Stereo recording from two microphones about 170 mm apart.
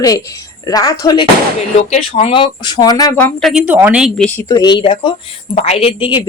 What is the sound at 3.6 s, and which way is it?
Speech, 10° right (ahead or behind).